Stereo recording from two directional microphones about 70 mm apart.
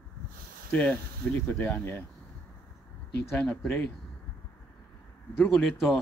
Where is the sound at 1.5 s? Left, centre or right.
Left.